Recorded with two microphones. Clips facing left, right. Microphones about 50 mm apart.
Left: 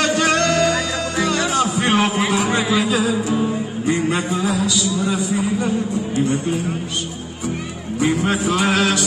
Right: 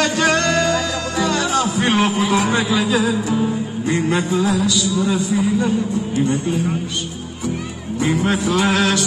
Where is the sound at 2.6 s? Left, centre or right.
Centre.